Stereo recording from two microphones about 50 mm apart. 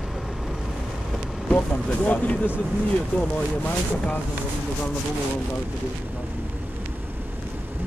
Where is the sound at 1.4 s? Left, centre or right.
Left.